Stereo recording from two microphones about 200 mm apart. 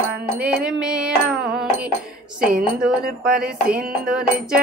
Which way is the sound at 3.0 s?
45° right (ahead or behind).